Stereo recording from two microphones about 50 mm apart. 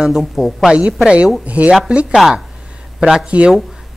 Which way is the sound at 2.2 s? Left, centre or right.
Centre.